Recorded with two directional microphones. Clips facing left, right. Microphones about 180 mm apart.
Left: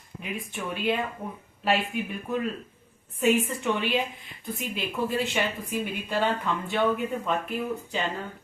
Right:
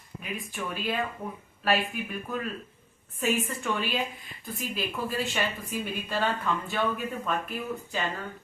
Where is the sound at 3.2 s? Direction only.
20° left (ahead or behind).